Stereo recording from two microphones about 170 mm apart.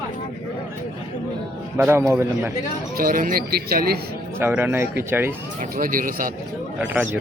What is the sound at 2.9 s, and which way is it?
Speech, 55° right (ahead or behind).